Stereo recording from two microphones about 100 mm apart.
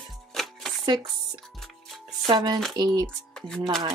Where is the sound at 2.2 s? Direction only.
40° right (ahead or behind).